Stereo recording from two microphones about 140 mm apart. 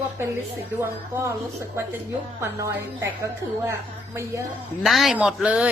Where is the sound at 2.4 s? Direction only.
20° right (ahead or behind).